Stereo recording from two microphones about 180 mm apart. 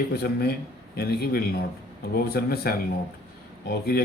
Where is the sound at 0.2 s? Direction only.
60° left (ahead or behind).